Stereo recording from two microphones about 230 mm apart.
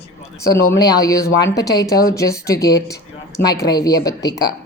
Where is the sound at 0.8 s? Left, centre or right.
Centre.